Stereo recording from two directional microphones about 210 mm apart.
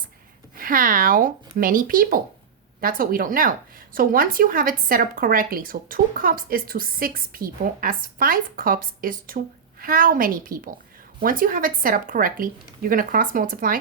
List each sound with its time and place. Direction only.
0.5 s a woman's voice: 40° right (ahead or behind)